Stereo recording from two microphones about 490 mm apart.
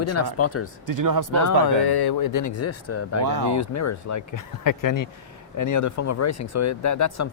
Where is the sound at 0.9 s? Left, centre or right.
Right.